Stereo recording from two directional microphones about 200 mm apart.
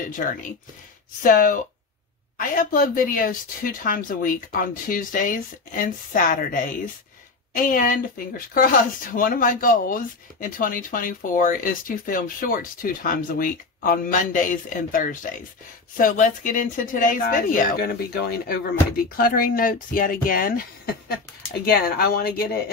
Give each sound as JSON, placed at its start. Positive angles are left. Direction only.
{"t": 0.1, "sound": "speech", "side_deg": 40}
{"t": 9.1, "sound": "speech", "side_deg": 45}